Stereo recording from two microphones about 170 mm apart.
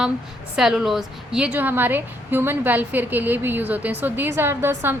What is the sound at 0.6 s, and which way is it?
A woman's voice, centre (ahead or behind).